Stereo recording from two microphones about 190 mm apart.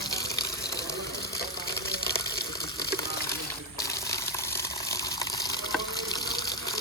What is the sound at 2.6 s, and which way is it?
Water, 20° left (ahead or behind).